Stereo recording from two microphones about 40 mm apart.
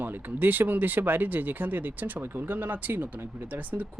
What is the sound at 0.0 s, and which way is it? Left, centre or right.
Speech, right.